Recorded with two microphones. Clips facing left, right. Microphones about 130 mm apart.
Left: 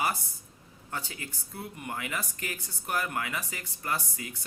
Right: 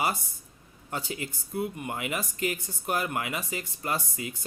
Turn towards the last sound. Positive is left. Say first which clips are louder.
# right 2 dB
turn(degrees=-20)  # may be behind; listen again after turning